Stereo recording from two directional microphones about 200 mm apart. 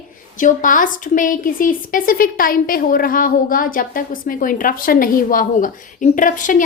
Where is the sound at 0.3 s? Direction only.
40° left (ahead or behind).